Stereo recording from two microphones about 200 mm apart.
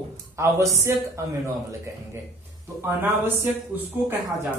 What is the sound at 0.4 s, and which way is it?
Speech, 15° right (ahead or behind).